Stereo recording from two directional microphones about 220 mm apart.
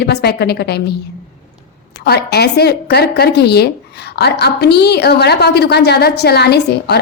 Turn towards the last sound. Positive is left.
turn(degrees=50)  # may be behind; listen again after turning